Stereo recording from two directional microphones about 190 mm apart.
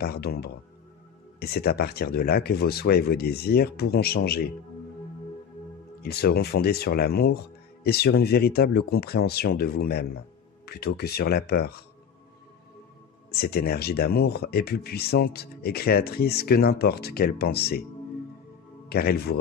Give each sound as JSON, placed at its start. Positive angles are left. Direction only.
{"t": 0.0, "sound": "speech", "side_deg": 55}
{"t": 6.0, "sound": "speech", "side_deg": 55}
{"t": 13.3, "sound": "speech", "side_deg": 55}
{"t": 18.9, "sound": "speech", "side_deg": 55}